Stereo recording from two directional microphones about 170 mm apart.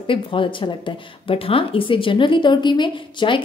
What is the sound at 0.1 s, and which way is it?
A woman's voice, 30° left (ahead or behind).